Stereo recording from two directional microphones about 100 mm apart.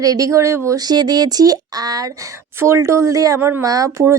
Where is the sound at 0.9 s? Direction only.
45° right (ahead or behind).